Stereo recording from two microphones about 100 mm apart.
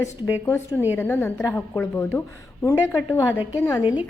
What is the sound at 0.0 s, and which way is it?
A woman's voice, 30° left (ahead or behind).